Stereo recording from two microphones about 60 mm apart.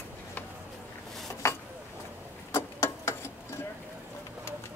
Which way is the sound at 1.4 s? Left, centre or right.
Left.